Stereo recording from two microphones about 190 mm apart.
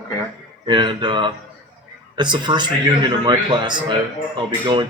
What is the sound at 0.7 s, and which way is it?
A man's voice, 25° right (ahead or behind).